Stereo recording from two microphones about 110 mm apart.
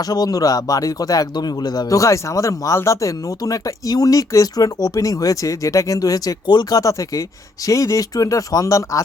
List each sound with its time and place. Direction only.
0.0 s speech: 35° left (ahead or behind)